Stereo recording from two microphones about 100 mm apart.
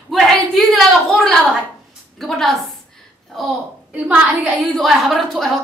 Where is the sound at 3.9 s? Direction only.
15° right (ahead or behind).